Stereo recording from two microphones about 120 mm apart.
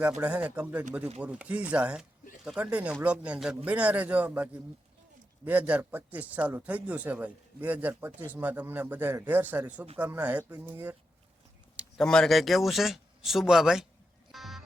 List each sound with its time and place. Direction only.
0.2 s speech: 10° right (ahead or behind)
5.5 s speech: 15° right (ahead or behind)
11.9 s speech: 5° left (ahead or behind)
14.3 s music: centre (ahead or behind)